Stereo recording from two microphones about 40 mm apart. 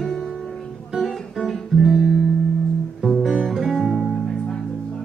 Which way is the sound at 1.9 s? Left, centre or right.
Centre.